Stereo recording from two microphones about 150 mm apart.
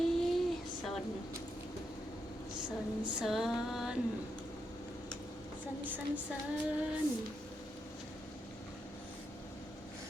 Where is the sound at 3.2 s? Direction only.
Centre (ahead or behind).